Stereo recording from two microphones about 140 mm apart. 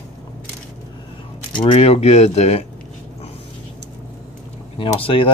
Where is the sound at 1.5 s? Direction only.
35° left (ahead or behind); by 2.6 s 50° left (ahead or behind).